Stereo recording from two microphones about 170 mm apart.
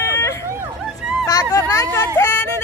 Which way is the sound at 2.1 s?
15° left (ahead or behind).